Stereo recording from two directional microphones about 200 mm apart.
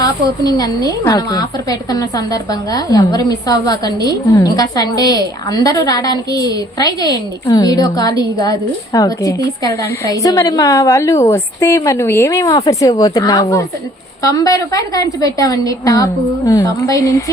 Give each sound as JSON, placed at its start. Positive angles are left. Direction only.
{"t": 0.0, "sound": "a woman's voice", "side_deg": 20}